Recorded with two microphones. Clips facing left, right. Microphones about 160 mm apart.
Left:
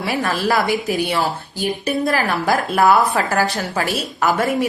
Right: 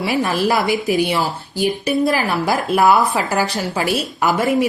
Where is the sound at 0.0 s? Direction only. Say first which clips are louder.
Right 2 dB; 15° right (ahead or behind).